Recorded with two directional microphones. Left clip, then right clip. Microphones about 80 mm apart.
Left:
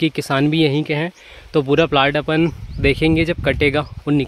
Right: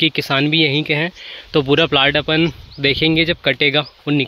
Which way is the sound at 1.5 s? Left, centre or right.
Centre.